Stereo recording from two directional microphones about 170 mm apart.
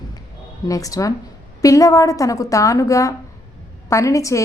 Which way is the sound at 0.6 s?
20° left (ahead or behind).